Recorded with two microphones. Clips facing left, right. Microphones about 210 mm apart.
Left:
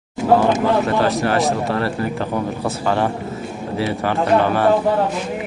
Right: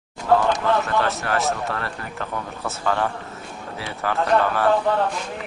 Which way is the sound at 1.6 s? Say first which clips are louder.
Left 8 dB; 30° left (ahead or behind).